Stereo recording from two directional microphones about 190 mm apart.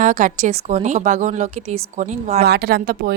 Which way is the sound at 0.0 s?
45° right (ahead or behind).